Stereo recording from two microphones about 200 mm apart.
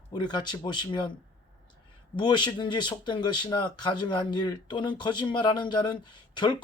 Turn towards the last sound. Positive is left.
turn(degrees=25)  # may be behind; listen again after turning